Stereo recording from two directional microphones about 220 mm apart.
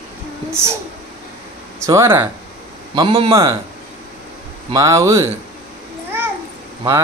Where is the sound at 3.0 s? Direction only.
25° right (ahead or behind).